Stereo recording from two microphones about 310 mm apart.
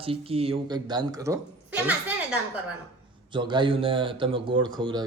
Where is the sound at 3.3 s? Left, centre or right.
Centre.